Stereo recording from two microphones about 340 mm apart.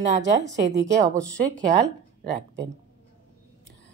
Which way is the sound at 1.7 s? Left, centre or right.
Right.